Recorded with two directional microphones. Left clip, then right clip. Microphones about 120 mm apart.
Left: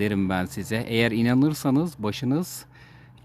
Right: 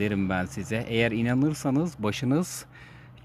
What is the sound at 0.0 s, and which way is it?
Speech, 30° left (ahead or behind).